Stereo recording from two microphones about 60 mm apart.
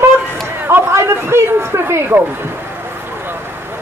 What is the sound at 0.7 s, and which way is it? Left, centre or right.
A woman's voice, right.